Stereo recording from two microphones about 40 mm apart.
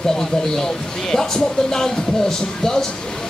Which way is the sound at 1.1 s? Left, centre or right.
Centre.